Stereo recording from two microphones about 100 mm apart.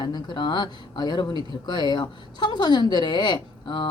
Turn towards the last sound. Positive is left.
turn(degrees=50)  # may be behind; listen again after turning